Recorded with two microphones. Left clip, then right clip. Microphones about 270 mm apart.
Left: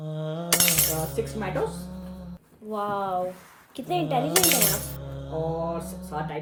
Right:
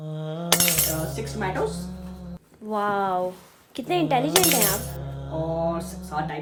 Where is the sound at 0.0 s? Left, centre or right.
Centre.